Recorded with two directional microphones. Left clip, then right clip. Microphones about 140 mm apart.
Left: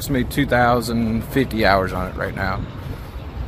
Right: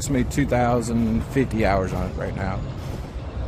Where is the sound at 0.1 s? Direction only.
Centre (ahead or behind).